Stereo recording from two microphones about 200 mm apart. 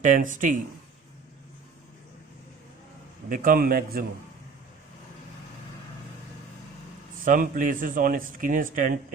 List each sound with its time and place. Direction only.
0.0 s speech: 40° right (ahead or behind)
3.2 s speech: 45° right (ahead or behind)
7.3 s speech: 40° right (ahead or behind)